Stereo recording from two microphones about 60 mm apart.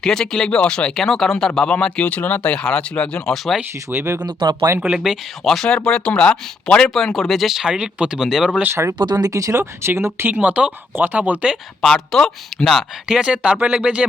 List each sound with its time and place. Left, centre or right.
0.0 s speech: centre
1.6 s speech: centre
3.3 s speech: centre
3.9 s speech: right
4.8 s speech: centre
5.5 s speech: centre
7.7 s speech: centre
8.7 s speech: right
9.1 s speech: right
9.9 s speech: right
10.3 s speech: right
11.8 s speech: centre
13.1 s speech: centre